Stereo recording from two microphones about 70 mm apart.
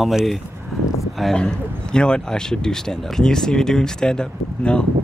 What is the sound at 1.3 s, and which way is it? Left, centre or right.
Speech, centre.